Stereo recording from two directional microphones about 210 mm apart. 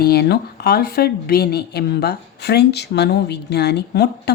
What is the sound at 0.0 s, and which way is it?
Speech, 50° left (ahead or behind).